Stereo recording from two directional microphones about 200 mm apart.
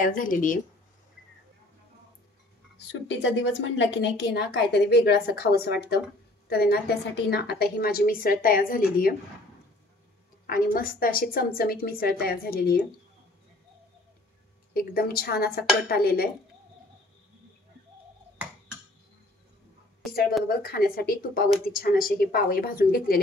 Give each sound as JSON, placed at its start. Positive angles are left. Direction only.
{"t": 0.0, "sound": "a woman's voice", "side_deg": 45}
{"t": 2.9, "sound": "a woman's voice", "side_deg": 60}
{"t": 10.4, "sound": "a woman's voice", "side_deg": 45}
{"t": 14.7, "sound": "a woman's voice", "side_deg": 50}
{"t": 20.4, "sound": "a woman's voice", "side_deg": 50}